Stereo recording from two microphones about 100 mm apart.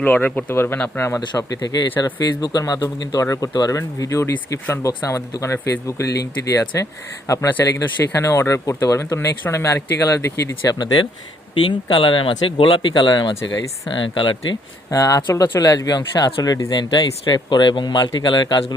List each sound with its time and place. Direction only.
0.0 s speech: 15° left (ahead or behind)
1.4 s a man's voice: 40° left (ahead or behind)
11.6 s speech: 55° left (ahead or behind)
14.8 s a man's voice: 35° left (ahead or behind); by 18.6 s 50° left (ahead or behind)